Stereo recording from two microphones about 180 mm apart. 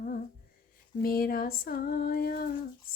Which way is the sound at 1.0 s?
55° left (ahead or behind).